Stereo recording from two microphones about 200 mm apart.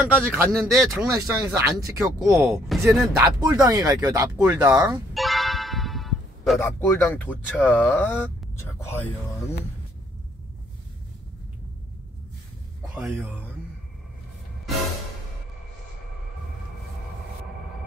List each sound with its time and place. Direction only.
0.0 s speech: 10° right (ahead or behind)
5.1 s music: centre (ahead or behind)
6.6 s speech: 10° left (ahead or behind)
12.8 s speech: centre (ahead or behind)